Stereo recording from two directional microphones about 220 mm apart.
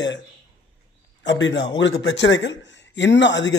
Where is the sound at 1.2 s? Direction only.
55° left (ahead or behind).